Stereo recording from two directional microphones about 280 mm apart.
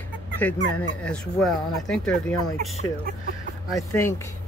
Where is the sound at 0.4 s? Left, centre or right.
Centre.